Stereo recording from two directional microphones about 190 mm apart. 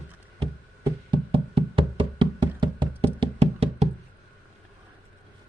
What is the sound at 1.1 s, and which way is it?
Knock, 25° right (ahead or behind).